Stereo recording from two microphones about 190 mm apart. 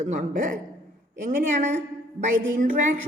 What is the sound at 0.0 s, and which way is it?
A woman's voice, 40° right (ahead or behind).